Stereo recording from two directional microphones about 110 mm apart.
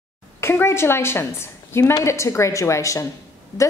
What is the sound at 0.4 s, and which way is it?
A woman's voice, 20° left (ahead or behind).